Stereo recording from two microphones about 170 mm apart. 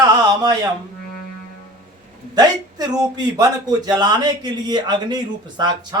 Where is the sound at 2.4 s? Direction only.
25° right (ahead or behind).